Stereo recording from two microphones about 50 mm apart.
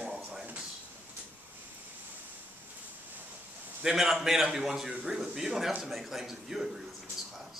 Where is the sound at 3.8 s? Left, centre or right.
Centre.